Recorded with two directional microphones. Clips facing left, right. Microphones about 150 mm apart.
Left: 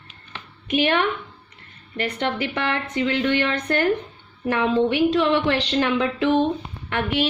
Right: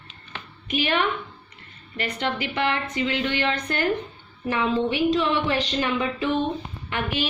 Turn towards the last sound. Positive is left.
turn(degrees=75)  # may be behind; listen again after turning